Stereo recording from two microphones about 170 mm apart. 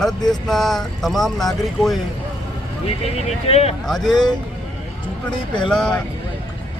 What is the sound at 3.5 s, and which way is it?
Speech, 35° left (ahead or behind).